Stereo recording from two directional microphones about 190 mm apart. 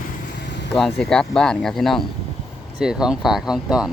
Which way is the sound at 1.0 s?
5° left (ahead or behind).